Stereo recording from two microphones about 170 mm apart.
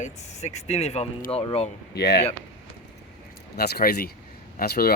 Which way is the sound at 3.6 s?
65° left (ahead or behind).